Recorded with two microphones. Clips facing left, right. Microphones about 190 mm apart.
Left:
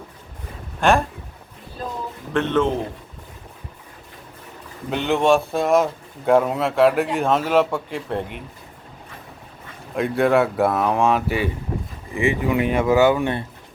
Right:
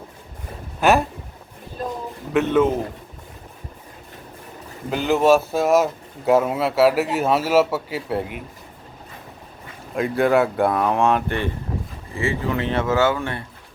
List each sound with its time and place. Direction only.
0.8 s speech: 5° right (ahead or behind)
2.3 s a man's voice: 10° right (ahead or behind)
4.9 s speech: centre (ahead or behind)
9.9 s speech: centre (ahead or behind)
12.1 s speech: 15° left (ahead or behind)